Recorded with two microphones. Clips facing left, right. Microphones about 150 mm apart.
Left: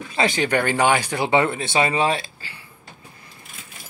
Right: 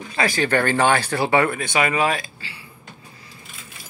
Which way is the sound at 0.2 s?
20° left (ahead or behind).